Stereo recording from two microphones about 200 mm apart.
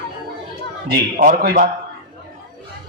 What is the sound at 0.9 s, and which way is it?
Speech, 45° right (ahead or behind).